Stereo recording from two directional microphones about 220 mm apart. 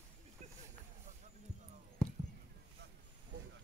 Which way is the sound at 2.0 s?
5° left (ahead or behind).